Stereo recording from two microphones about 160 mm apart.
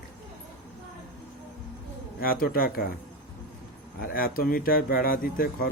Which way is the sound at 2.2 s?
65° left (ahead or behind).